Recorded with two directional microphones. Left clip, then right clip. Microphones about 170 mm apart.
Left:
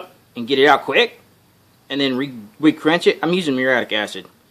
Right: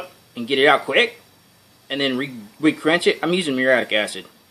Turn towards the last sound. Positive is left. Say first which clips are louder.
# even
turn(degrees=40)  # may be behind; listen again after turning